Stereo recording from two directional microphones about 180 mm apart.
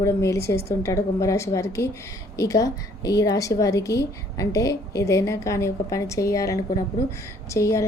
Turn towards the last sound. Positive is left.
turn(degrees=15)  # may be behind; listen again after turning